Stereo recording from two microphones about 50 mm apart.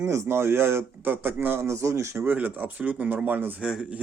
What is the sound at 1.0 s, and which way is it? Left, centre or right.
Speech, right.